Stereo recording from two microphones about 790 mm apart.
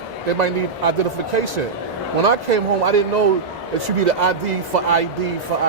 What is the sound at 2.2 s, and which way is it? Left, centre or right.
A man's voice, right.